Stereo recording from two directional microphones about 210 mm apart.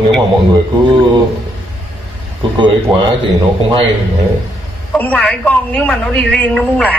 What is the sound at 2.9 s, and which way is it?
Speech, 20° right (ahead or behind).